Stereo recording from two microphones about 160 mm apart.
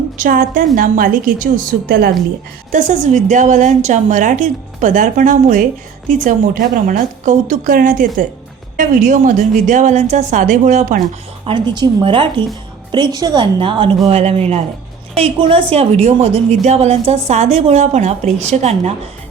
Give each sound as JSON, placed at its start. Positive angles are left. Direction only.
{"t": 0.2, "sound": "a woman's voice", "side_deg": -60}
{"t": 2.7, "sound": "a woman's voice", "side_deg": -55}
{"t": 11.4, "sound": "a woman's voice", "side_deg": -30}